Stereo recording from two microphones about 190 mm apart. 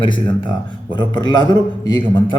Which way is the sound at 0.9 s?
25° left (ahead or behind).